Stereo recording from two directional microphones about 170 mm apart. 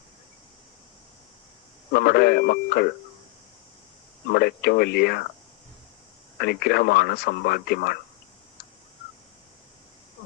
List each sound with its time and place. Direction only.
1.9 s speech: 65° left (ahead or behind)
4.3 s speech: 65° left (ahead or behind)
6.4 s speech: 65° left (ahead or behind)